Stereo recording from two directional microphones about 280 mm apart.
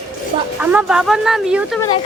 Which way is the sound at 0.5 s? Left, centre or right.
Centre.